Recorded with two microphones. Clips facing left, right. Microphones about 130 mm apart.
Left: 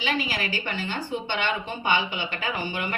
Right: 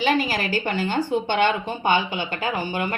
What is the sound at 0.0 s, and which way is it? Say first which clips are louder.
Speech: right 6 dB; 45° right (ahead or behind).